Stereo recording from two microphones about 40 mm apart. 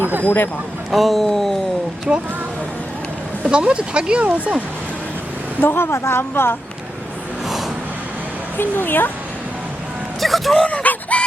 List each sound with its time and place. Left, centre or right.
0.3 s speech: left
0.9 s speech: centre
2.1 s speech: right
3.4 s speech: right
5.5 s a woman's voice: left
8.5 s speech: left
10.2 s a sound: centre
10.7 s a sound: left